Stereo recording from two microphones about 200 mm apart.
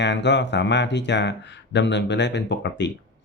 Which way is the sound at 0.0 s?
60° left (ahead or behind).